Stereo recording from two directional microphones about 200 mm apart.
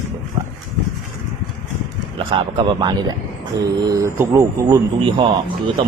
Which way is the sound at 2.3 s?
25° right (ahead or behind).